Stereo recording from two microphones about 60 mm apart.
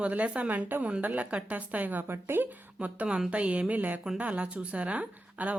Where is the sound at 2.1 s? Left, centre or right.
Right.